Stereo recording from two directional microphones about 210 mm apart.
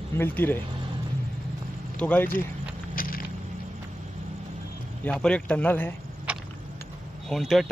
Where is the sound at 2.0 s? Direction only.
5° left (ahead or behind).